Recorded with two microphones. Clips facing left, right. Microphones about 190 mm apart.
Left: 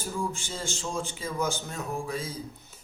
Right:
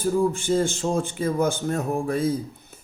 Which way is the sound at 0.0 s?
55° right (ahead or behind).